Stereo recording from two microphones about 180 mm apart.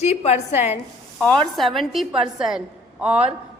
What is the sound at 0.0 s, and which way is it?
Speech, 35° left (ahead or behind).